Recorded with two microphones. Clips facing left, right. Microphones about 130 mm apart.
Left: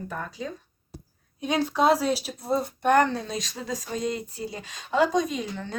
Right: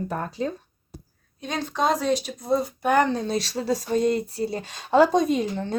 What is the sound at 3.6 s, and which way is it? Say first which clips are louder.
Speech: right 8 dB; 30° right (ahead or behind).